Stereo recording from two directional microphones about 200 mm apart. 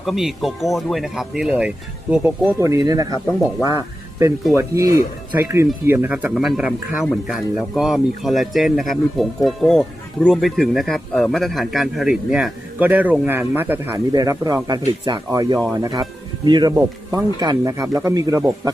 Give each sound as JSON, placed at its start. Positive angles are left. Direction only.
{"t": 0.0, "sound": "speech", "side_deg": 0}
{"t": 4.5, "sound": "speech", "side_deg": -15}